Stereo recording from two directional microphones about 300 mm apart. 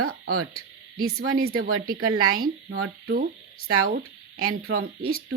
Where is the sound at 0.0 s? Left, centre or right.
Right.